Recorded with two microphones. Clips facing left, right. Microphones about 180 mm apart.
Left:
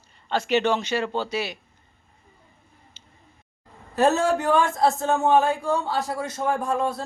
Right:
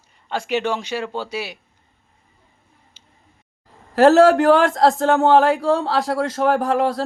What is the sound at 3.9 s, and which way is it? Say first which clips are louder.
Speech: right 9 dB; 90° right.